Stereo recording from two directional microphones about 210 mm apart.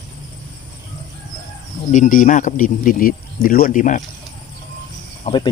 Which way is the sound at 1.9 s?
35° left (ahead or behind).